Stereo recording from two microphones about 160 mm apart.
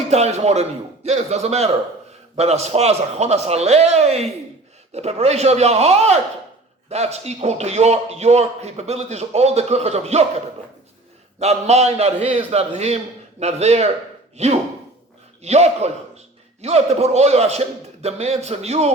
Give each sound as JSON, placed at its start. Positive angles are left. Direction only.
{"t": 0.1, "sound": "a man's voice", "side_deg": -40}
{"t": 11.3, "sound": "a man's voice", "side_deg": -40}